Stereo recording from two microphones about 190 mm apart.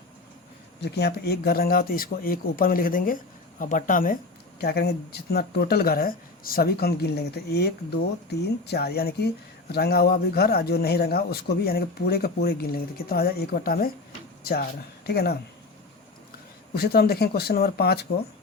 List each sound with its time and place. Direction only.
0.8 s speech: 60° left (ahead or behind)
4.6 s speech: 55° left (ahead or behind)
16.7 s speech: 55° left (ahead or behind)